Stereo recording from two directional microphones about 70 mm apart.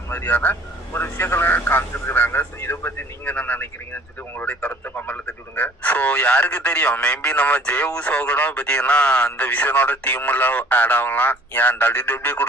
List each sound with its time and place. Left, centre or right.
0.1 s speech: left